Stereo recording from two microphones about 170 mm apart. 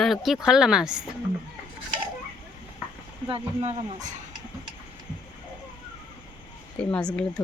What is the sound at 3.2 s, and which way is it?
Speech, 35° right (ahead or behind).